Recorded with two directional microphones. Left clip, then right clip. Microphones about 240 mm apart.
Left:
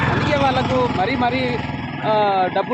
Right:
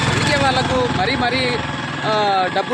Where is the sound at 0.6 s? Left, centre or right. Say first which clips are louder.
Right 1 dB; left.